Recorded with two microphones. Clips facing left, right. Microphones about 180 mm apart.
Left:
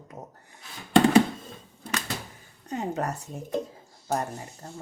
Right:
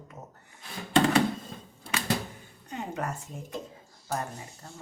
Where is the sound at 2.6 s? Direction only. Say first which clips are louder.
Left 5 dB; 40° left (ahead or behind).